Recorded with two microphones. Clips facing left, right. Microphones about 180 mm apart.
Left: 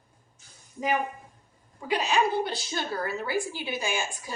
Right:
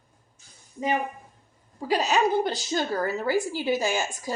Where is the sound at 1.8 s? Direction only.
40° right (ahead or behind).